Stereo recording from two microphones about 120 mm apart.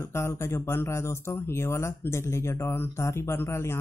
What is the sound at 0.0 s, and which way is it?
Speech, 20° left (ahead or behind).